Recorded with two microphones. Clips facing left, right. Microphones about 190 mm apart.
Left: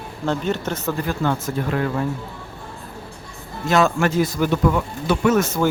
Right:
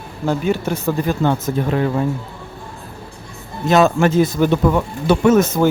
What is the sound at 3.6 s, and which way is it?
Speech, 20° right (ahead or behind).